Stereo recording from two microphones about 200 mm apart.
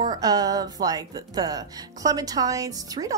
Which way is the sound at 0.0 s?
20° right (ahead or behind).